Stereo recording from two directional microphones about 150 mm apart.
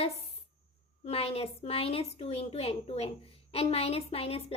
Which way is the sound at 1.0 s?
40° left (ahead or behind).